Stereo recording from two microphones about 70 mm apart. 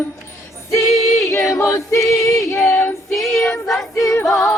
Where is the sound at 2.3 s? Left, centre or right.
Left.